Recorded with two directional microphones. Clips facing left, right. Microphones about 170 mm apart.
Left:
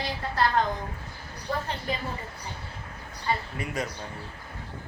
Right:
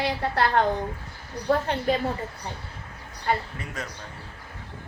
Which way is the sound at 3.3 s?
65° right (ahead or behind).